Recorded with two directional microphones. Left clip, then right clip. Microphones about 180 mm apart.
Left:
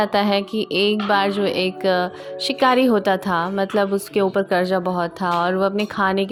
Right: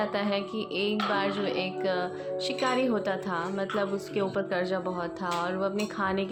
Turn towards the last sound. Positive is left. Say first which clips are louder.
# left 9 dB
turn(degrees=50)  # may be behind; listen again after turning